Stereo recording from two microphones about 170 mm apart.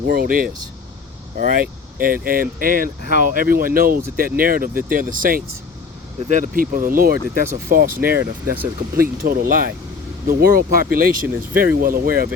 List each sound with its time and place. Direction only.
0.1 s speech: 60° right (ahead or behind)